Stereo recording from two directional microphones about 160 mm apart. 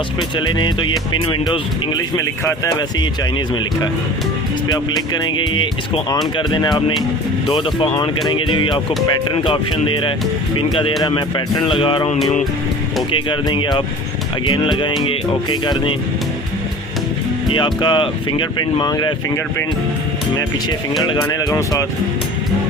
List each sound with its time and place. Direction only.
0.2 s speech: 30° left (ahead or behind)
11.0 s speech: 30° left (ahead or behind)
17.5 s speech: 30° left (ahead or behind)
21.0 s speech: 25° left (ahead or behind)